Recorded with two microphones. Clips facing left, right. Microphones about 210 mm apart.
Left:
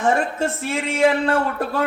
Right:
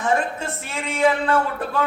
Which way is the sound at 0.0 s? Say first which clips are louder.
Left 3 dB; 40° left (ahead or behind).